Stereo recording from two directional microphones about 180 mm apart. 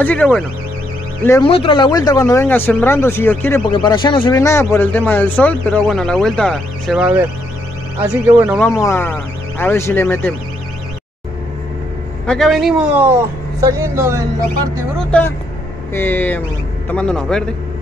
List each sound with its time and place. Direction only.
0.0 s speech: 10° left (ahead or behind)
1.4 s speech: 30° left (ahead or behind); by 3.6 s 10° left (ahead or behind)
3.7 s speech: 25° left (ahead or behind)
4.3 s speech: 15° left (ahead or behind); by 8.5 s 10° right (ahead or behind)
8.5 s speech: 15° left (ahead or behind)
12.3 s speech: centre (ahead or behind); by 14.2 s 15° right (ahead or behind)
15.0 s a man's voice: 10° left (ahead or behind)